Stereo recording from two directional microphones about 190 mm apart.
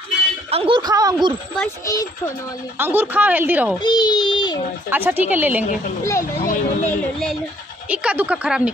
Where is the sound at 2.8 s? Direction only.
10° right (ahead or behind).